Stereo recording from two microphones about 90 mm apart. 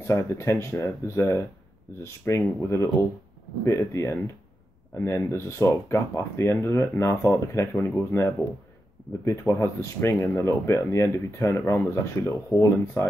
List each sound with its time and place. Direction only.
0.0 s speech: 30° left (ahead or behind)